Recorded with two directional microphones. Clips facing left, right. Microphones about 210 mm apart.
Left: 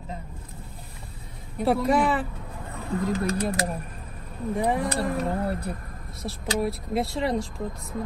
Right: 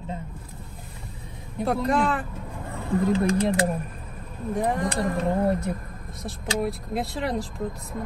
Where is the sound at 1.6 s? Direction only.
Centre (ahead or behind).